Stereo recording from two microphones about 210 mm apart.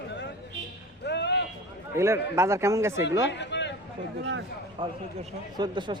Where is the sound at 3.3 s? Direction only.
55° left (ahead or behind).